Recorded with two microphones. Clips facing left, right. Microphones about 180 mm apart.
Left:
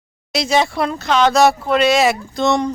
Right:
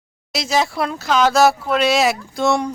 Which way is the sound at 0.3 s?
Centre (ahead or behind).